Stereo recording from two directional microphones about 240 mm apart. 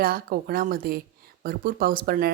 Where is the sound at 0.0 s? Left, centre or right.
Right.